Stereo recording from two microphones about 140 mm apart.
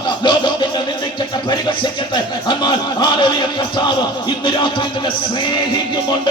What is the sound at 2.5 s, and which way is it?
Speech, 35° left (ahead or behind).